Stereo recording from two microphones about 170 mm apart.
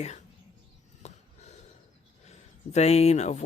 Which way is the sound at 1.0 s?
40° left (ahead or behind).